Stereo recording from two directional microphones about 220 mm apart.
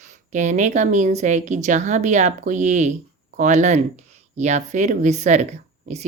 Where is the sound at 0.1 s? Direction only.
35° right (ahead or behind).